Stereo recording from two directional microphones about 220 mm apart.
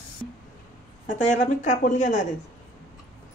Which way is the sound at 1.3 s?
35° left (ahead or behind).